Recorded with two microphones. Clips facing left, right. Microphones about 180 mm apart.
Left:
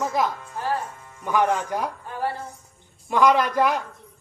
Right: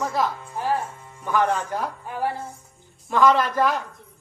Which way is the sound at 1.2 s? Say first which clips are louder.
Even; 15° left (ahead or behind).